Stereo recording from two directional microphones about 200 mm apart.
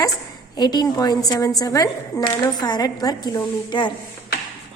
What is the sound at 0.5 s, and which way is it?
A woman's voice, 20° left (ahead or behind).